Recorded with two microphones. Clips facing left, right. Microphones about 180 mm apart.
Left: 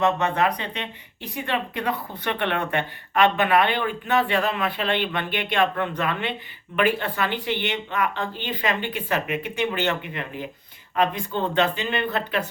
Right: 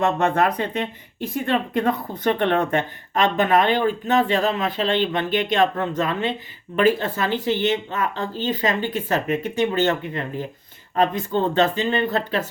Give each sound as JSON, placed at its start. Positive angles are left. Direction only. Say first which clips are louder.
{"t": 0.0, "sound": "speech", "louder": "right 2 dB", "side_deg": -50}
{"t": 4.8, "sound": "speech", "louder": "right 4 dB", "side_deg": -30}
{"t": 5.3, "sound": "speech", "louder": "right 3 dB", "side_deg": -40}